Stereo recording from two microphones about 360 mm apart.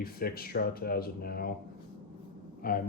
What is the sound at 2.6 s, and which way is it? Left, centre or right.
Speech, left.